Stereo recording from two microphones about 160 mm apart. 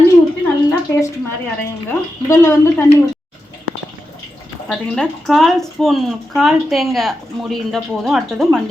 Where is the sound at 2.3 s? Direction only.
15° left (ahead or behind).